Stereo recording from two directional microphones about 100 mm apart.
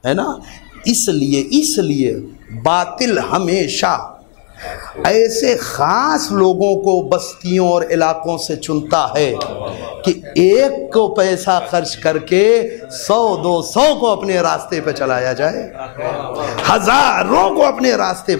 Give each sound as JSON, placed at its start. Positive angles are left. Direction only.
{"t": 0.0, "sound": "a man's voice", "side_deg": 15}